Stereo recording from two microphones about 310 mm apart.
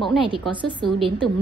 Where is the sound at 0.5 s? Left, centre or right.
Centre.